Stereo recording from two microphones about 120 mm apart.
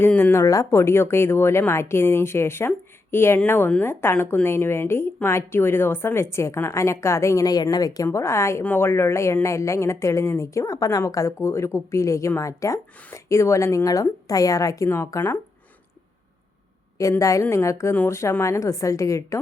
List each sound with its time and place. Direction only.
0.0 s a woman's voice: 20° left (ahead or behind)
17.0 s a woman's voice: 25° left (ahead or behind)